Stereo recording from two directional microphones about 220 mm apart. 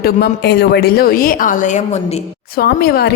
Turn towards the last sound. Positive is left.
turn(degrees=45)  # may be behind; listen again after turning